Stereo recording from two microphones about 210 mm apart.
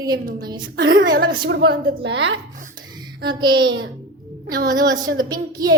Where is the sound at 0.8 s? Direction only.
55° right (ahead or behind).